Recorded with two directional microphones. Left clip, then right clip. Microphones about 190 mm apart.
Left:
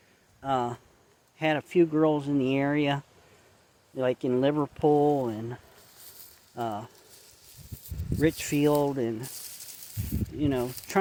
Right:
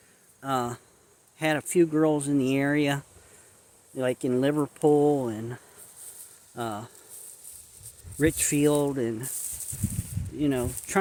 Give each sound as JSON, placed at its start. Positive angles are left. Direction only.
{"t": 0.4, "sound": "speech", "side_deg": -15}
{"t": 6.6, "sound": "speech", "side_deg": -15}
{"t": 8.2, "sound": "speech", "side_deg": -15}
{"t": 10.3, "sound": "speech", "side_deg": -10}